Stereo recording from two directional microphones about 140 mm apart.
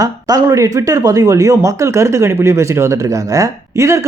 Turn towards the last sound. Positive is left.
turn(degrees=-20)  # may be behind; listen again after turning